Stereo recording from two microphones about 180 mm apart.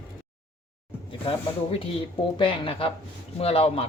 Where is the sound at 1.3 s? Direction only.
30° left (ahead or behind).